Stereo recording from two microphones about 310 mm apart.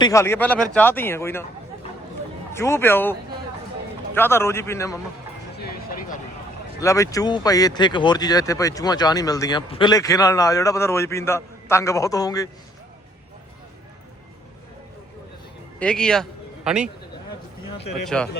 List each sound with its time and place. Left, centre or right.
0.0 s speech: centre
2.5 s speech: centre
5.5 s a sound: left
6.7 s speech: centre
15.8 s a man's voice: centre
18.0 s a man's voice: centre